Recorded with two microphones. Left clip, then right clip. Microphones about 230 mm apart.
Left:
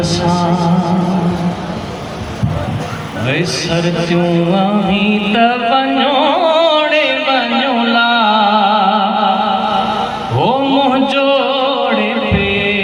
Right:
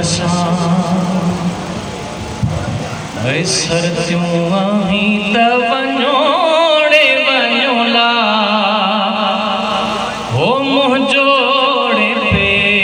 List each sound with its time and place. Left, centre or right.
0.0 s music: right
3.2 s a sound: right
10.4 s music: right